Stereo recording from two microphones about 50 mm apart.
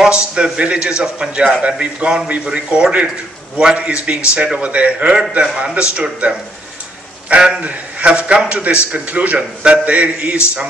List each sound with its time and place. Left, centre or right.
0.1 s a man's voice: right
7.2 s a man's voice: centre